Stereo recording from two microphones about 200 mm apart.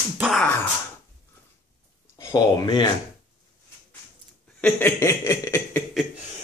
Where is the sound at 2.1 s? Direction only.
20° left (ahead or behind).